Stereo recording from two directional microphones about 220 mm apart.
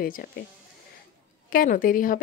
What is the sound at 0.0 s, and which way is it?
Speech, 40° left (ahead or behind).